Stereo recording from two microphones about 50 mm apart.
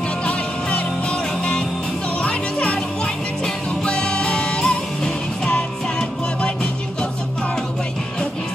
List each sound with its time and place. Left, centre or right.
0.2 s music: left
2.2 s music: left
3.8 s music: centre